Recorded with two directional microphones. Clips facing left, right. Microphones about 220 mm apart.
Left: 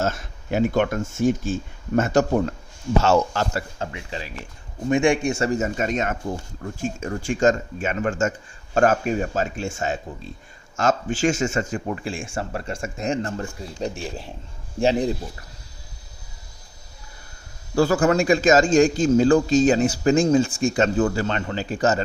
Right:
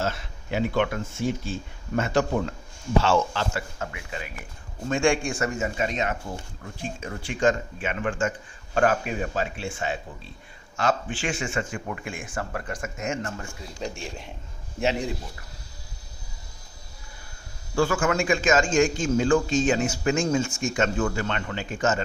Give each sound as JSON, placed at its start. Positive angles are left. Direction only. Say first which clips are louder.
{"t": 0.0, "sound": "a man's voice", "louder": "left 4 dB", "side_deg": 45}
{"t": 4.9, "sound": "speech", "louder": "left 4 dB", "side_deg": 20}
{"t": 5.5, "sound": "a man's voice", "louder": "left 4 dB", "side_deg": 45}
{"t": 17.7, "sound": "a man's voice", "louder": "left 5 dB", "side_deg": 40}